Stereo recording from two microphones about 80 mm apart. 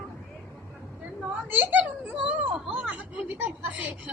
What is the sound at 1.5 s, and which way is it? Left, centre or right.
A child's voice, right.